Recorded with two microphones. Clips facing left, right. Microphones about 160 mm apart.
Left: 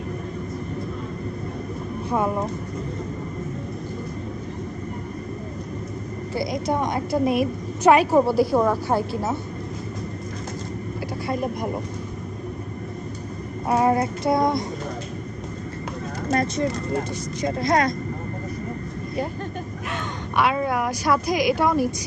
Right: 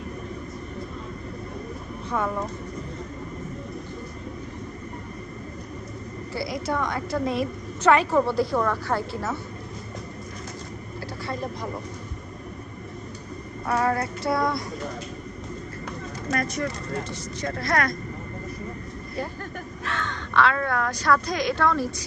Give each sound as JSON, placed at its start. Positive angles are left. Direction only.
{"t": 2.1, "sound": "speech", "side_deg": 20}
{"t": 6.3, "sound": "a woman's voice", "side_deg": 15}
{"t": 8.3, "sound": "a woman's voice", "side_deg": 10}
{"t": 11.3, "sound": "a woman's voice", "side_deg": 15}
{"t": 13.7, "sound": "speech", "side_deg": 20}
{"t": 16.3, "sound": "speech", "side_deg": 25}
{"t": 19.9, "sound": "a woman's voice", "side_deg": 15}